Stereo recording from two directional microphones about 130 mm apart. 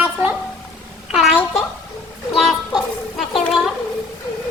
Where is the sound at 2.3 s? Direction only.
Centre (ahead or behind).